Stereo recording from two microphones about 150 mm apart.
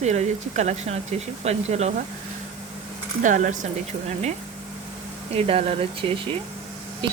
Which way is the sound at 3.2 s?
55° right (ahead or behind).